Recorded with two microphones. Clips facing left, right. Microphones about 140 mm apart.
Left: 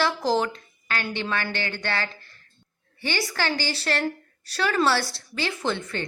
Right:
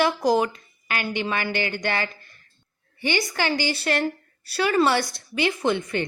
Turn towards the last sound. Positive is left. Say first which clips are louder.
# right 4 dB
turn(degrees=-15)  # may be behind; listen again after turning